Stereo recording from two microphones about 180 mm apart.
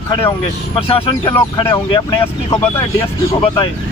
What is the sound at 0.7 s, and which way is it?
Speech, 30° left (ahead or behind).